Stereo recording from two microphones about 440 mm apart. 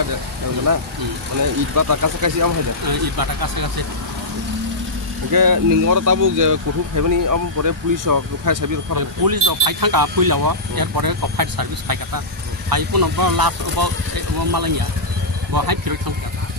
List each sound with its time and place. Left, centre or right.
1.8 s speech: right
5.3 s speech: right
15.5 s speech: right